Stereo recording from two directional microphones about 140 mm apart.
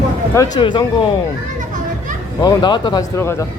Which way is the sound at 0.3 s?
30° left (ahead or behind).